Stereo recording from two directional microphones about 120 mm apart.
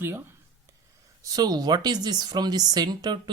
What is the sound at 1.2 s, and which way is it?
Speech, 30° right (ahead or behind).